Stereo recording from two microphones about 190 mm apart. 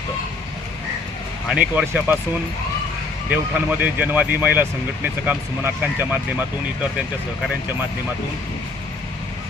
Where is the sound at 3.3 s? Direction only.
10° right (ahead or behind).